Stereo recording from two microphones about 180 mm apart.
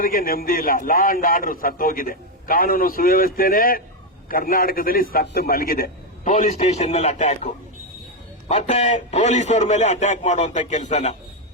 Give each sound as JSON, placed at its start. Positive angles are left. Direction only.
{"t": 0.0, "sound": "a man's voice", "side_deg": 50}
{"t": 6.3, "sound": "a man's voice", "side_deg": 40}